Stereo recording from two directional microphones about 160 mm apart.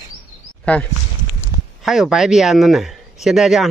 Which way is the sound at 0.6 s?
10° left (ahead or behind).